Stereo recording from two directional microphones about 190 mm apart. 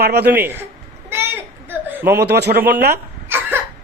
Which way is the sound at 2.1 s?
60° right (ahead or behind).